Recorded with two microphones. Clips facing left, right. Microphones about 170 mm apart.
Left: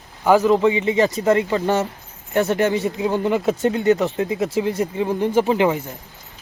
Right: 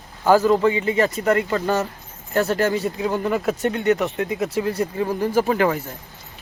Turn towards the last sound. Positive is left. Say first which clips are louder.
# left 2 dB
turn(degrees=20)  # may be behind; listen again after turning